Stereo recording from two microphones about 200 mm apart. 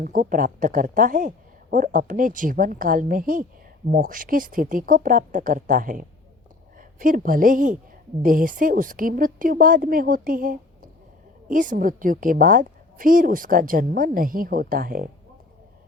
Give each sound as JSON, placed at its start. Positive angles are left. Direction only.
{"t": 0.0, "sound": "a woman's voice", "side_deg": -40}